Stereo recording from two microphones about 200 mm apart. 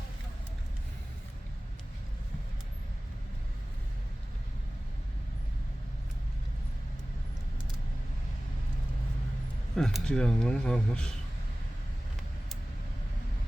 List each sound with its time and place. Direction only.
9.7 s speech: 5° left (ahead or behind)